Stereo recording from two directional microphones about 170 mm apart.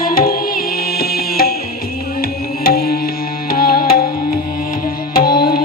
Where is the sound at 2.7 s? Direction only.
65° left (ahead or behind).